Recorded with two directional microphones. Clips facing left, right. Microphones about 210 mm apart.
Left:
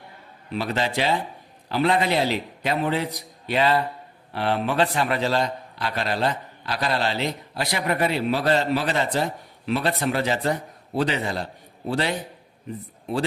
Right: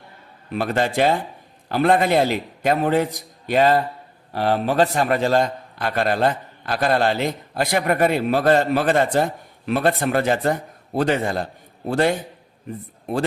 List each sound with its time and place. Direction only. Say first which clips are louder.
0.5 s a man's voice: right 4 dB; 50° right (ahead or behind)